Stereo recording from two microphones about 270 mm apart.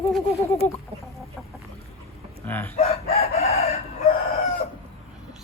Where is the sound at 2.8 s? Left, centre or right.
Left.